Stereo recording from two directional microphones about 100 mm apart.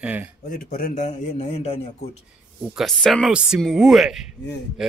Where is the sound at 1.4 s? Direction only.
90° left.